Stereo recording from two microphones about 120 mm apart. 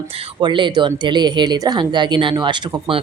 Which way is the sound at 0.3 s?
40° right (ahead or behind).